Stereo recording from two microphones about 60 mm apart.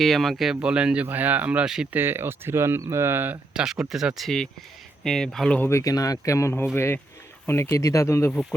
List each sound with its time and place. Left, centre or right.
0.0 s speech: centre
0.6 s speech: centre
1.0 s speech: right
1.6 s speech: centre
1.9 s speech: right
3.5 s speech: centre
5.0 s speech: centre
5.8 s speech: left
6.7 s a man's voice: left
7.9 s speech: left